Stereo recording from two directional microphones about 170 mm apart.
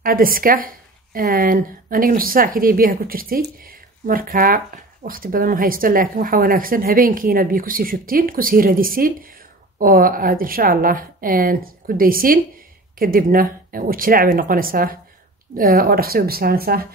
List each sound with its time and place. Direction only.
0.0 s a woman's voice: 55° right (ahead or behind)